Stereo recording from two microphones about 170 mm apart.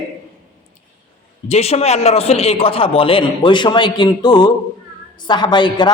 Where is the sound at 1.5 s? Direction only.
40° left (ahead or behind).